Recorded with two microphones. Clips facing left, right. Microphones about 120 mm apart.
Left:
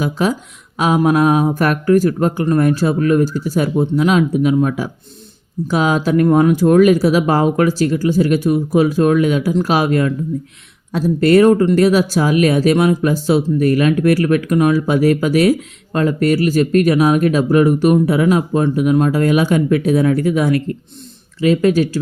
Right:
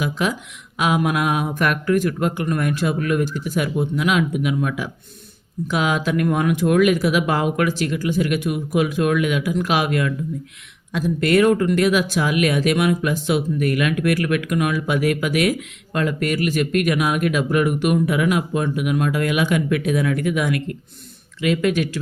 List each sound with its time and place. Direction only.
0.0 s speech: 35° left (ahead or behind)